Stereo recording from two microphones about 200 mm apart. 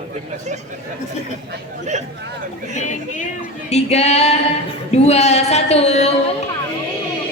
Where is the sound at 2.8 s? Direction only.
40° left (ahead or behind).